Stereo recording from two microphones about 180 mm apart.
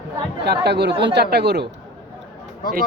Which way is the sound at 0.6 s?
65° right (ahead or behind).